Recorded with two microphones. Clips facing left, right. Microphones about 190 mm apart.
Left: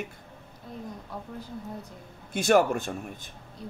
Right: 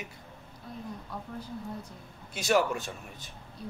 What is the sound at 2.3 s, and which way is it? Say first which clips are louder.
Speech: left 5 dB; 55° left (ahead or behind).